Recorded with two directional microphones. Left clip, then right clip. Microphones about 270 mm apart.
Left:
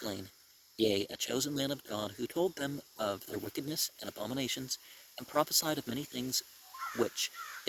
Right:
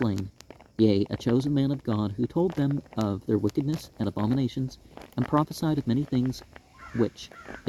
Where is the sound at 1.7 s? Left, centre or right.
Left.